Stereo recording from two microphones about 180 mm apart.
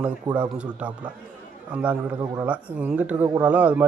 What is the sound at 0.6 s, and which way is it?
Speech, 5° right (ahead or behind).